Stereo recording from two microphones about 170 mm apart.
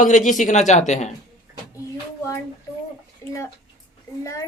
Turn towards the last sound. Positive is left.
turn(degrees=20)  # may be behind; listen again after turning